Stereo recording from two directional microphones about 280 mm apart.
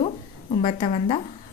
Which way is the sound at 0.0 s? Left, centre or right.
Left.